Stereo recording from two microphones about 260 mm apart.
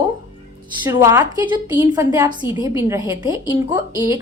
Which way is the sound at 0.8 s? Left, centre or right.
Centre.